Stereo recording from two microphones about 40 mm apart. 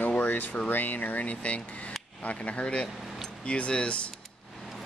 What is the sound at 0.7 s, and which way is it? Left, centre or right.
Speech, left.